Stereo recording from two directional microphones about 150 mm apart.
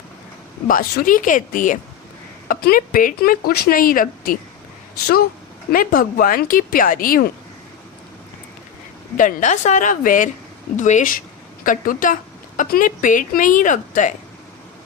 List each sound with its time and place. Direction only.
0.7 s speech: 70° left (ahead or behind)
5.7 s speech: 65° left (ahead or behind)
9.1 s speech: 60° left (ahead or behind)